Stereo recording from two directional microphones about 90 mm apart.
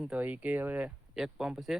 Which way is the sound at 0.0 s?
15° right (ahead or behind).